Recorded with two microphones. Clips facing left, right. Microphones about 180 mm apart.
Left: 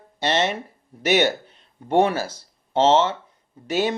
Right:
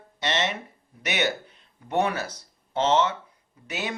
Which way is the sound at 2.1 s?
30° left (ahead or behind).